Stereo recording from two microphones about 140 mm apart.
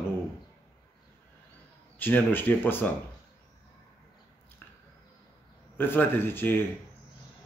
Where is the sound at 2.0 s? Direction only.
15° left (ahead or behind).